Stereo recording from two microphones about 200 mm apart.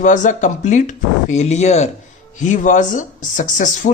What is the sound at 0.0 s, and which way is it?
Speech, 40° left (ahead or behind).